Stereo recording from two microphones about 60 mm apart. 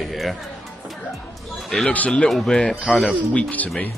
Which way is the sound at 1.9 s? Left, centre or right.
Left.